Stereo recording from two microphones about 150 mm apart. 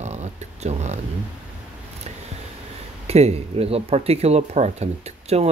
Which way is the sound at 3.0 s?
45° right (ahead or behind).